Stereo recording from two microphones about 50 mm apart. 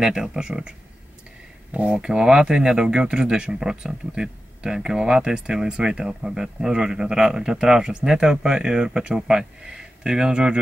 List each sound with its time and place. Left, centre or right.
0.0 s speech: centre
1.9 s speech: centre